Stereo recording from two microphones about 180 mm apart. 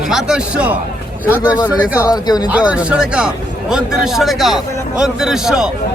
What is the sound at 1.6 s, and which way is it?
Speech, 20° left (ahead or behind).